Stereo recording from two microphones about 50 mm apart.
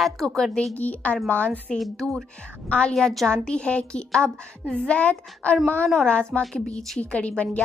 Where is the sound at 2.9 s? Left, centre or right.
Centre; by 5.5 s left.